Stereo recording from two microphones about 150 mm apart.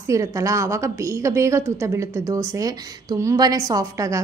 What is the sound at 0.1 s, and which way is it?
A woman's voice, 20° right (ahead or behind).